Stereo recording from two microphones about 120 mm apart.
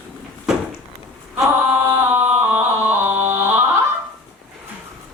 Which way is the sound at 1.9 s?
15° right (ahead or behind).